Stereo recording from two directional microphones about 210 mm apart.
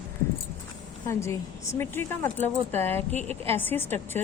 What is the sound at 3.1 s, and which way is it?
Speech, 30° right (ahead or behind).